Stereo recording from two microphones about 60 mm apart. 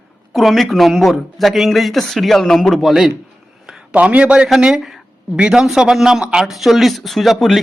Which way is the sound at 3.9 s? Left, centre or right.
Right.